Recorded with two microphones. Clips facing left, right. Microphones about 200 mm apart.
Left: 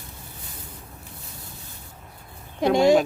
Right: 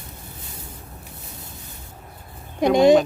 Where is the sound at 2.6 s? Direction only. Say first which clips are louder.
Right 3 dB; 15° right (ahead or behind).